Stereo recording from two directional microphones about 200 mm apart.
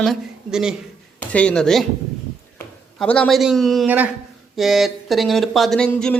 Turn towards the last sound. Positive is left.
turn(degrees=5)  # may be behind; listen again after turning